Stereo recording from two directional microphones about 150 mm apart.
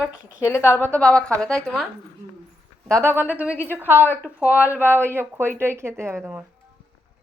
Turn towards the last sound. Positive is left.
turn(degrees=-15)  # may be behind; listen again after turning